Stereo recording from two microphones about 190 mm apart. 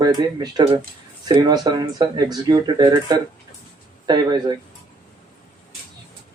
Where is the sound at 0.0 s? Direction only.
20° right (ahead or behind).